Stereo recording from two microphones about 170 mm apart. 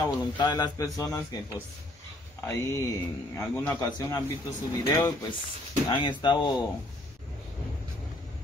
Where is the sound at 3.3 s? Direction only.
15° left (ahead or behind).